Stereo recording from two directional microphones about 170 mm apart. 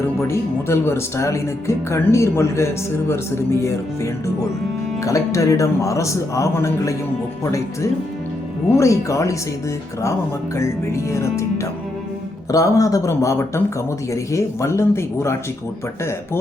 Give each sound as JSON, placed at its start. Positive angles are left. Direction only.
{"t": 0.2, "sound": "speech", "side_deg": 15}
{"t": 8.7, "sound": "speech", "side_deg": 15}